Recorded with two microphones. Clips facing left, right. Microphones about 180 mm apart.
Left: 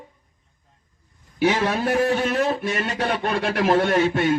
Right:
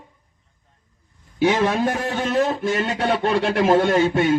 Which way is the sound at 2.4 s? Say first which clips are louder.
Right 2 dB; centre (ahead or behind).